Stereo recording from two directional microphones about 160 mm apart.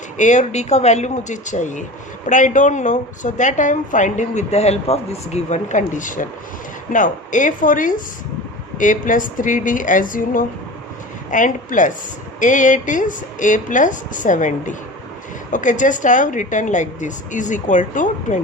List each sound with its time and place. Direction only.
0.2 s a woman's voice: 50° left (ahead or behind)